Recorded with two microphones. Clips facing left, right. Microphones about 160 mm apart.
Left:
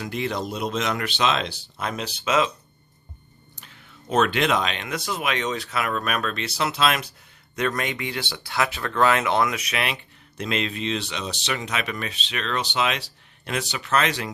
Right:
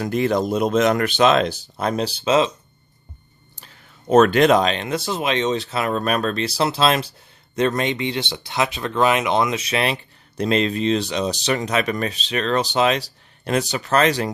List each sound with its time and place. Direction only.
0.0 s speech: 45° right (ahead or behind); by 2.5 s 30° right (ahead or behind)
3.5 s speech: 35° right (ahead or behind)